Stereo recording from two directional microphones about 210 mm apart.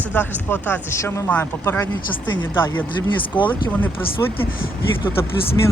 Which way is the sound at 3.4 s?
10° left (ahead or behind).